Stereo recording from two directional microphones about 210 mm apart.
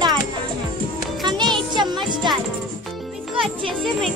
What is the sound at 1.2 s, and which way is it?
Music, 20° right (ahead or behind).